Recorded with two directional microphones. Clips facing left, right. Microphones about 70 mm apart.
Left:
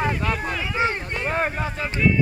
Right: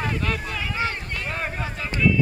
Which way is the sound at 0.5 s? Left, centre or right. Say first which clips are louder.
Left 3 dB; left.